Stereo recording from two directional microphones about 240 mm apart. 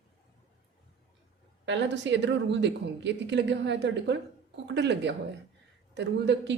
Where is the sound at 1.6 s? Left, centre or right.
Right.